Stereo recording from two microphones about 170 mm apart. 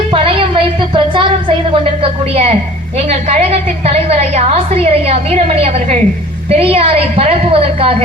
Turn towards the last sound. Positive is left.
turn(degrees=-35)  # may be behind; listen again after turning